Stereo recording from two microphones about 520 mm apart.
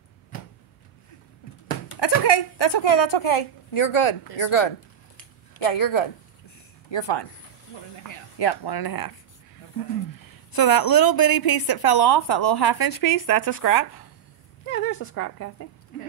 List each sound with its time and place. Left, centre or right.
1.9 s a woman's voice: left
6.9 s speech: left
10.1 s a woman's voice: left
14.7 s speech: left